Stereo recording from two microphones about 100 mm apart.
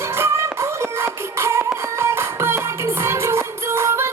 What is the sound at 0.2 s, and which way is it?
Music, 25° right (ahead or behind).